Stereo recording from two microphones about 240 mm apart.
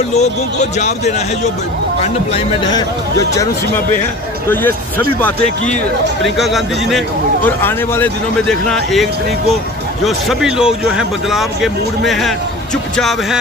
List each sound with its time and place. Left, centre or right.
0.1 s speech: left
2.3 s speech: centre
6.2 s speech: centre